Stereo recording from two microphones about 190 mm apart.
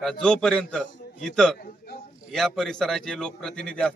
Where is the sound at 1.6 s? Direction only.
55° left (ahead or behind).